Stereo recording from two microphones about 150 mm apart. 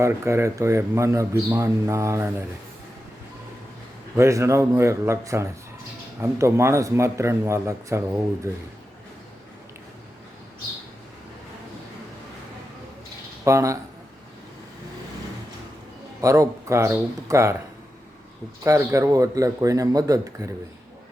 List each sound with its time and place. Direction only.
0.0 s a man's voice: 15° right (ahead or behind)
4.2 s a man's voice: 20° right (ahead or behind)
13.4 s speech: 20° right (ahead or behind)
16.2 s a man's voice: 20° right (ahead or behind)
18.6 s a man's voice: 20° right (ahead or behind)